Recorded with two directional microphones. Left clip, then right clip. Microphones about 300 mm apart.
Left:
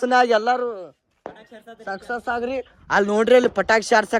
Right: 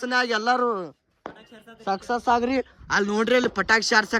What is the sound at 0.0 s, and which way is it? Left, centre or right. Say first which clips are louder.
Speech: left 6 dB; centre.